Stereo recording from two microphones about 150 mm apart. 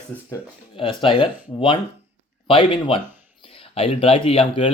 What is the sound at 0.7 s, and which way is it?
Speech, 35° left (ahead or behind).